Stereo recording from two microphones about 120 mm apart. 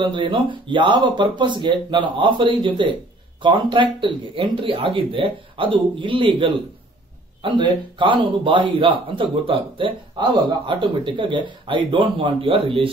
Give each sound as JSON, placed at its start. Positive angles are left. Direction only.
{"t": 0.0, "sound": "speech", "side_deg": -45}